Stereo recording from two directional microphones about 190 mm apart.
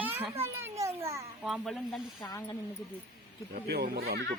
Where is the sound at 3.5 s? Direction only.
55° right (ahead or behind).